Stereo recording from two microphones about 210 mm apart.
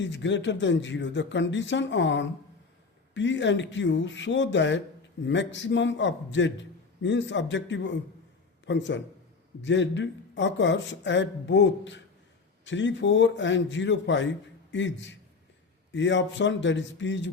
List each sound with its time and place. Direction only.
0.0 s a man's voice: 60° left (ahead or behind)